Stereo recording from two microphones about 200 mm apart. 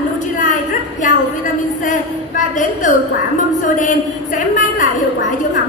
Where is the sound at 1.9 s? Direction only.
40° left (ahead or behind).